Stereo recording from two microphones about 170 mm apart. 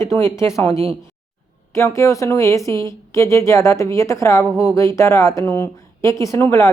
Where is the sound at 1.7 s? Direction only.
15° left (ahead or behind).